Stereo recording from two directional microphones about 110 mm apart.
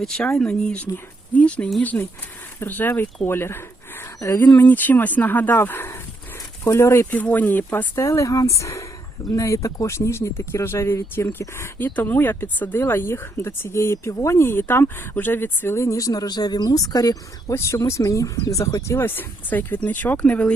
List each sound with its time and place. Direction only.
0.0 s speech: 5° left (ahead or behind)